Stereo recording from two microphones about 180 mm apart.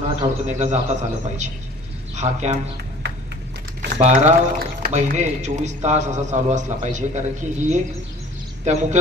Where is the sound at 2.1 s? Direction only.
40° right (ahead or behind).